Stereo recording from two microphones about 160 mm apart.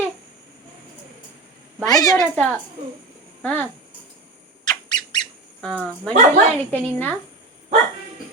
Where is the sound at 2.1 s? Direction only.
5° left (ahead or behind).